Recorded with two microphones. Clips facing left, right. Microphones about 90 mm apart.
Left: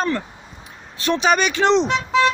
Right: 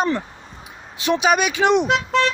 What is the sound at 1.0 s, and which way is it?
Speech, 10° right (ahead or behind).